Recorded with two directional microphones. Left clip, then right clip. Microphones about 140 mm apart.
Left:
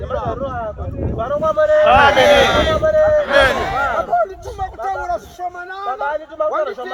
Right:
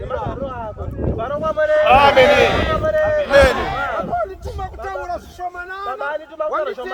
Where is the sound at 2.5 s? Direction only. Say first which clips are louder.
Left 4 dB; 70° left (ahead or behind).